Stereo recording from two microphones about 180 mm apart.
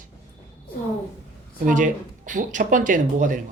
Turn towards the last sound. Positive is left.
turn(degrees=-45)  # may be behind; listen again after turning